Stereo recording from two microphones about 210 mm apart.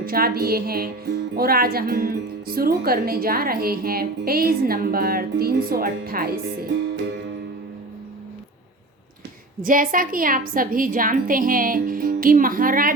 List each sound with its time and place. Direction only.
0.0 s speech: 45° right (ahead or behind)
9.6 s a woman's voice: 40° right (ahead or behind)